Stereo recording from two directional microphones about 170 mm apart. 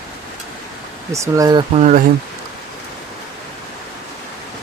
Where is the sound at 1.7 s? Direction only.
45° right (ahead or behind).